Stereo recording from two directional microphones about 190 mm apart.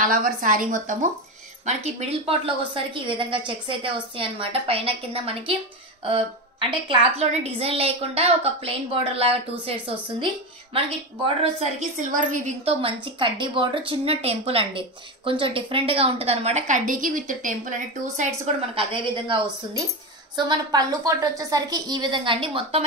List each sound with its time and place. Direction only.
0.0 s a woman's voice: 45° right (ahead or behind)
18.4 s a woman's voice: 25° right (ahead or behind)